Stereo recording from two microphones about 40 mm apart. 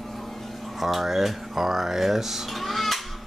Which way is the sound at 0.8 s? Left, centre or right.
Centre.